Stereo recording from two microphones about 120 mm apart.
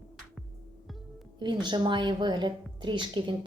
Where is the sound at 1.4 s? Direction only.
40° right (ahead or behind).